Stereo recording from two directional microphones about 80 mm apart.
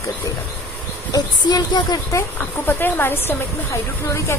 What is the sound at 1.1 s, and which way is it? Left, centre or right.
Speech, left.